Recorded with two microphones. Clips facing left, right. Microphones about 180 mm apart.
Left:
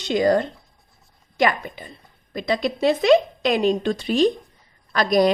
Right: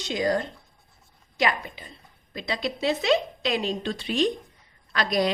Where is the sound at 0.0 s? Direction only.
65° left (ahead or behind).